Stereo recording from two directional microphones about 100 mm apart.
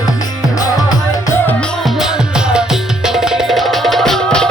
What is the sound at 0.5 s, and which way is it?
Music, 40° left (ahead or behind).